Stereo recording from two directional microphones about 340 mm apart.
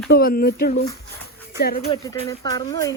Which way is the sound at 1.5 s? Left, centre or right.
Left.